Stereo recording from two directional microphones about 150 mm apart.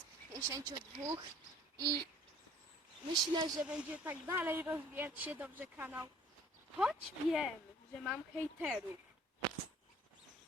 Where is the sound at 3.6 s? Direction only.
10° right (ahead or behind).